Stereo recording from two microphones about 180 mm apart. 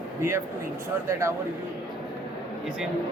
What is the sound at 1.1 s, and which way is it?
Speech, 15° right (ahead or behind).